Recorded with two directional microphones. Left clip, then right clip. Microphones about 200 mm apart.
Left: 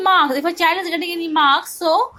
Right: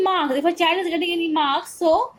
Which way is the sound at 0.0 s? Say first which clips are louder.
Left 4 dB; 45° left (ahead or behind).